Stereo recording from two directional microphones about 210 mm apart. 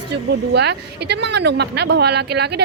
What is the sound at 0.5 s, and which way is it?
A woman's voice, 55° right (ahead or behind).